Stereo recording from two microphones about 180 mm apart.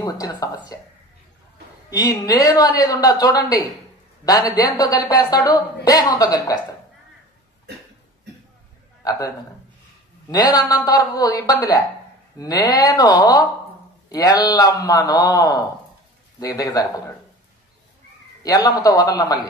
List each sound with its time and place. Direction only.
0.0 s a woman's voice: 20° left (ahead or behind)
1.9 s a woman's voice: 20° left (ahead or behind)
10.3 s a woman's voice: 20° left (ahead or behind)
18.4 s a woman's voice: 20° left (ahead or behind)